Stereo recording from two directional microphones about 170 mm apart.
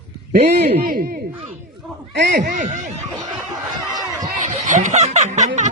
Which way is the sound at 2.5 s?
45° right (ahead or behind).